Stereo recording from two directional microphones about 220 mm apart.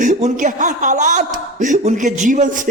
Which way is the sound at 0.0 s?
35° right (ahead or behind).